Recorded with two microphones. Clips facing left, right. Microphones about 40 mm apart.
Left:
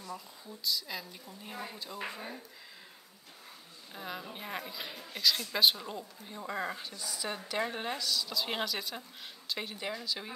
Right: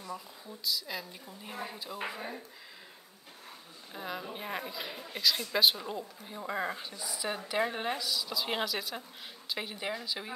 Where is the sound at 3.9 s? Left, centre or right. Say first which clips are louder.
Right 3 dB; centre.